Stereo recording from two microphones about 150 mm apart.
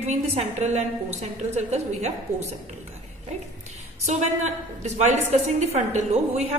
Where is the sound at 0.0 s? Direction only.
50° right (ahead or behind).